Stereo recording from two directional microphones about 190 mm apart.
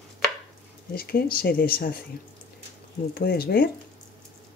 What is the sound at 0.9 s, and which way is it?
Speech, 50° left (ahead or behind).